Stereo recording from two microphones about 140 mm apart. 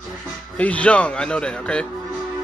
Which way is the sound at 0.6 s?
10° left (ahead or behind).